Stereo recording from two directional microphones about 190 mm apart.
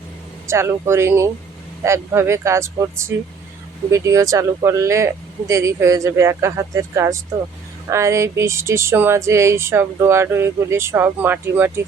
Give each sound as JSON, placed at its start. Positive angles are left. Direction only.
{"t": 0.4, "sound": "speech", "side_deg": -15}